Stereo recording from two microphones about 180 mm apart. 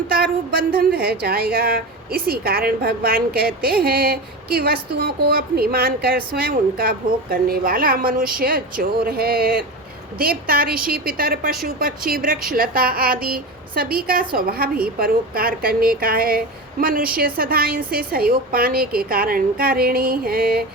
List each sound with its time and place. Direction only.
0.1 s a woman's voice: 55° right (ahead or behind)